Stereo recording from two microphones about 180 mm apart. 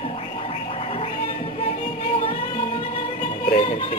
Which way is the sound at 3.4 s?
35° left (ahead or behind).